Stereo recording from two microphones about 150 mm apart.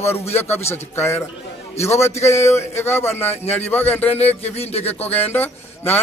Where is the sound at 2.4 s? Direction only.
20° left (ahead or behind).